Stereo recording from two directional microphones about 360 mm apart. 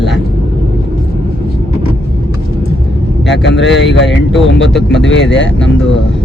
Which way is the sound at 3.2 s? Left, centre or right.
Left.